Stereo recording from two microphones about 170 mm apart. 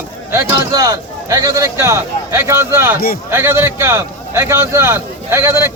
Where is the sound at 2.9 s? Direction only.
60° left (ahead or behind).